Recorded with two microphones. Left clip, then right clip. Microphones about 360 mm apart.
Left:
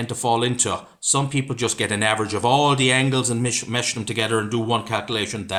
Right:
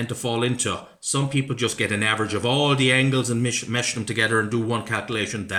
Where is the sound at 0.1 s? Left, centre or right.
Centre.